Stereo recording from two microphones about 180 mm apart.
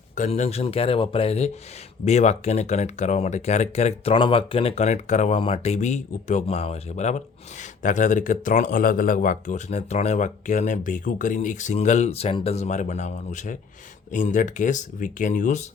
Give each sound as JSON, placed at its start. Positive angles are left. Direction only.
{"t": 0.2, "sound": "speech", "side_deg": 35}